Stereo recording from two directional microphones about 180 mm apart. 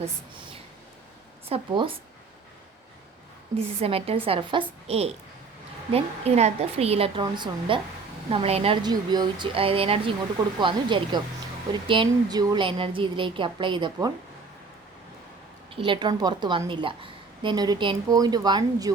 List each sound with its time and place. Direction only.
1.5 s speech: 30° right (ahead or behind)
3.8 s a woman's voice: 30° right (ahead or behind)
15.7 s a woman's voice: 30° right (ahead or behind)